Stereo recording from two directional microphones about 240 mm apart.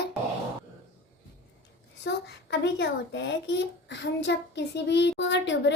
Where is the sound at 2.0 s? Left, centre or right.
Left.